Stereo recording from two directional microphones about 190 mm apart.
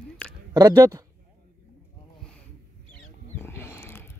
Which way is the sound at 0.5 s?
20° right (ahead or behind).